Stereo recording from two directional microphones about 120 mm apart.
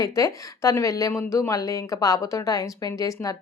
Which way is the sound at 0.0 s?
25° left (ahead or behind).